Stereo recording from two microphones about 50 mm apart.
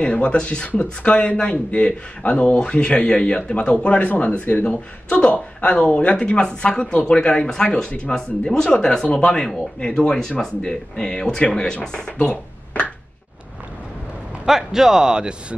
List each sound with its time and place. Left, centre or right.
0.0 s a man's voice: left
8.6 s a man's voice: left
9.1 s a man's voice: centre
14.4 s speech: centre